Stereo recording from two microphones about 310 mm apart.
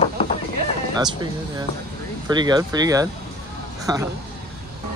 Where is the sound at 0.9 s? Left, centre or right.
Centre.